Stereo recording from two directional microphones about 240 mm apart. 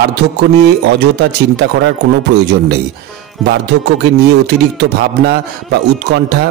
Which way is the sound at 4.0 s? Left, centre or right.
Right.